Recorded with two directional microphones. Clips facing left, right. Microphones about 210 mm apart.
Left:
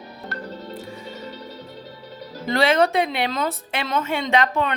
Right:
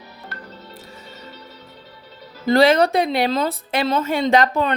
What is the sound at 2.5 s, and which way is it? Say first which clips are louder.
A woman's voice: right 4 dB; 35° right (ahead or behind).